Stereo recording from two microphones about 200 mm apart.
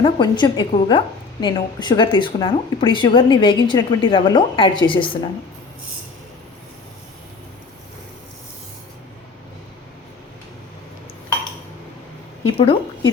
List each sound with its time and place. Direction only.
0.0 s a woman's voice: 20° left (ahead or behind)
12.5 s a woman's voice: 25° left (ahead or behind)